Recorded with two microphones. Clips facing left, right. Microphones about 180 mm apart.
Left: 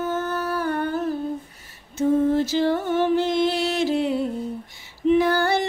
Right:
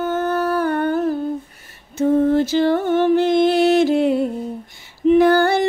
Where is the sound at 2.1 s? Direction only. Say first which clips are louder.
Right 4 dB; 60° right (ahead or behind).